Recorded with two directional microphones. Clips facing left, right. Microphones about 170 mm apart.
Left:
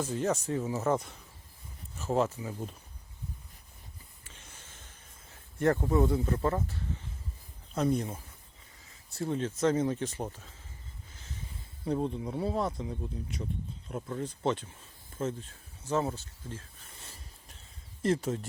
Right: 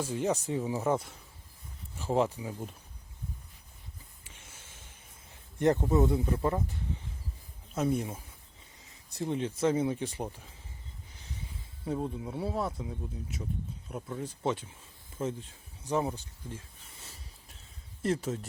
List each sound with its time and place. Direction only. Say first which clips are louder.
0.0 s speech: even; 10° right (ahead or behind)
4.2 s a sound: left 1 dB; 10° right (ahead or behind)
5.5 s speech: right 1 dB; 20° right (ahead or behind)
11.9 s speech: left 2 dB; 5° right (ahead or behind)
18.0 s speech: left 2 dB; centre (ahead or behind)